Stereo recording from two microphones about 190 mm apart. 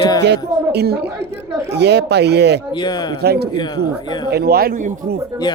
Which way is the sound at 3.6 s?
20° left (ahead or behind).